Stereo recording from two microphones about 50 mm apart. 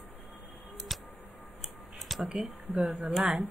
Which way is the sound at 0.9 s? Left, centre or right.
Centre.